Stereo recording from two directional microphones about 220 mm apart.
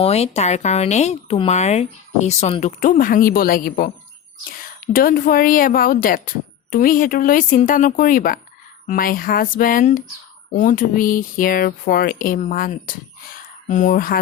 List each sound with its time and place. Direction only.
0.0 s speech: 30° left (ahead or behind)